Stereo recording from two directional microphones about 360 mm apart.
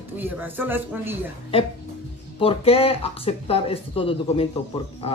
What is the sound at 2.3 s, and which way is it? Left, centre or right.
Speech, centre.